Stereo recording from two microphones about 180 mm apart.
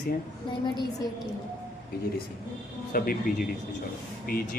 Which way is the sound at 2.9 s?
55° left (ahead or behind).